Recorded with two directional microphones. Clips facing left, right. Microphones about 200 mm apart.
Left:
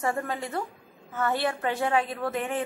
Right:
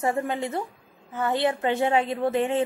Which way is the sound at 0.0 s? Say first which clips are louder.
Right 4 dB; 25° right (ahead or behind).